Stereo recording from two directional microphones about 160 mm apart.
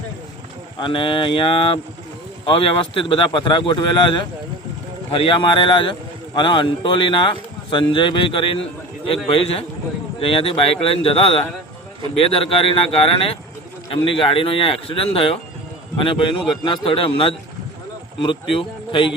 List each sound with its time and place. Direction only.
0.8 s a man's voice: 30° left (ahead or behind)
18.5 s a man's voice: 30° left (ahead or behind)